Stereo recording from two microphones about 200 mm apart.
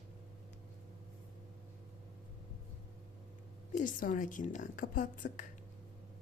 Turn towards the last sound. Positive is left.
turn(degrees=40)  # may be behind; listen again after turning